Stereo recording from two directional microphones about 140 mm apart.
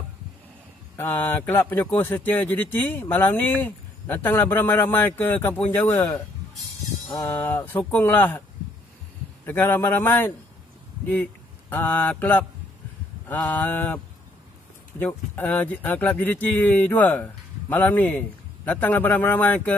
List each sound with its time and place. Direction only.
0.9 s speech: 15° left (ahead or behind)
9.5 s speech: 15° left (ahead or behind)
11.7 s speech: 10° left (ahead or behind)